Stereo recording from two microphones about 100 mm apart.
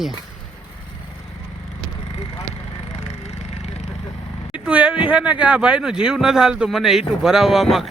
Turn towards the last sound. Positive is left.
turn(degrees=0)  # may be behind; listen again after turning